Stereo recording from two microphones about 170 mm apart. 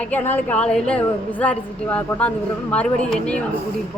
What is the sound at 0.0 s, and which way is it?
A woman's voice, 10° left (ahead or behind).